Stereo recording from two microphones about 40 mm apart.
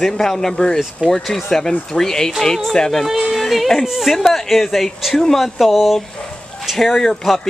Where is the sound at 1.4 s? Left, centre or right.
Centre.